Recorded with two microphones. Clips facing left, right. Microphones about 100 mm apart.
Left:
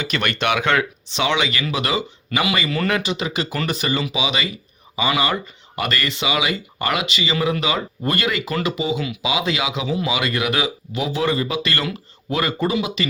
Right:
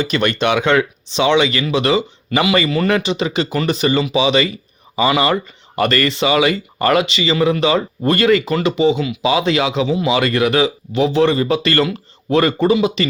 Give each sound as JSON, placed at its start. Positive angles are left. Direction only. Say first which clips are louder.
{"t": 0.0, "sound": "speech", "louder": "right 5 dB", "side_deg": -25}